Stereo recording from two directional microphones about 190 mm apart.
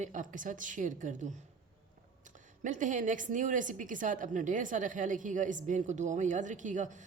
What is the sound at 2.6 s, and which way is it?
A woman's voice, 40° right (ahead or behind).